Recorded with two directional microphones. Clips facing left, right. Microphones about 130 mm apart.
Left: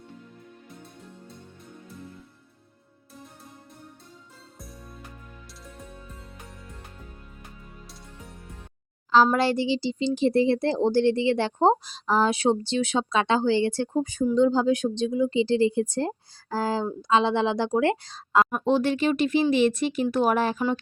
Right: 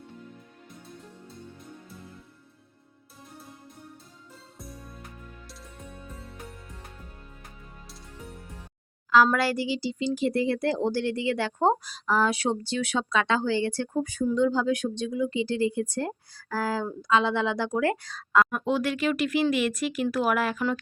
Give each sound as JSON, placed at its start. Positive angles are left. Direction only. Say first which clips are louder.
{"t": 4.5, "sound": "music", "louder": "right 2 dB", "side_deg": 0}
{"t": 9.1, "sound": "speech", "louder": "left 2 dB", "side_deg": 25}